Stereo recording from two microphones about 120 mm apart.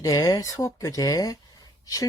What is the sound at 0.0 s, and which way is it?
Speech, 30° left (ahead or behind).